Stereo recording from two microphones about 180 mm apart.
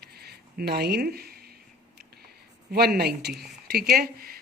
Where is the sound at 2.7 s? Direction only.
60° right (ahead or behind).